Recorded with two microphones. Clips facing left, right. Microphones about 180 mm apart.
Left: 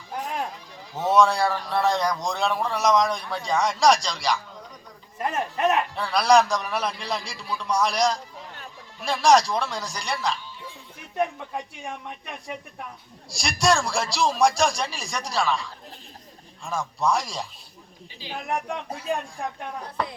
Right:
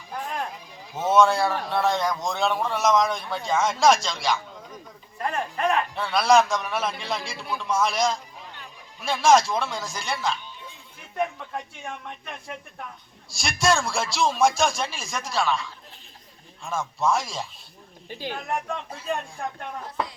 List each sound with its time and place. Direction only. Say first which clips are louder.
0.9 s a man's voice: even; centre (ahead or behind)
5.2 s speech: left 2 dB; 20° left (ahead or behind)
5.9 s a man's voice: right 1 dB; centre (ahead or behind)
18.1 s speech: right 6 dB; 55° right (ahead or behind)
18.3 s a man's voice: left 3 dB; centre (ahead or behind)